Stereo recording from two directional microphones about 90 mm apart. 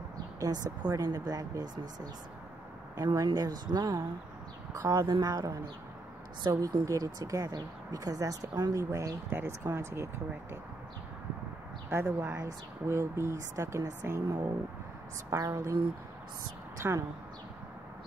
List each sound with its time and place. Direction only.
0.4 s speech: 45° right (ahead or behind)
3.3 s speech: 50° right (ahead or behind)
9.3 s speech: 25° right (ahead or behind)
11.9 s speech: 30° right (ahead or behind)
15.2 s speech: 40° right (ahead or behind)
16.8 s speech: 25° right (ahead or behind)